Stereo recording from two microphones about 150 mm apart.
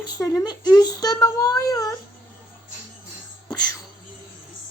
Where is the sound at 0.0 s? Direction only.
20° left (ahead or behind).